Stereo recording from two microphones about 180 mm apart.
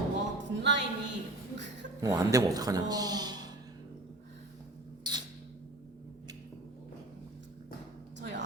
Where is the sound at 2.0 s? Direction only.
20° right (ahead or behind).